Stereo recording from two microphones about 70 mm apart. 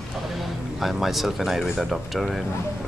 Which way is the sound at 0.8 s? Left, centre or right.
Centre.